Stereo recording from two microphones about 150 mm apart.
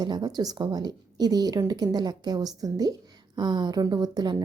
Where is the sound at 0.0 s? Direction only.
25° right (ahead or behind).